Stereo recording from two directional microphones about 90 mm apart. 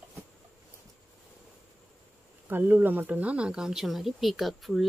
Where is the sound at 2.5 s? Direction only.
20° right (ahead or behind).